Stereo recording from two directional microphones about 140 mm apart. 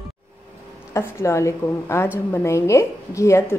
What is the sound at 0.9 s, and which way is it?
A woman's voice, 20° left (ahead or behind).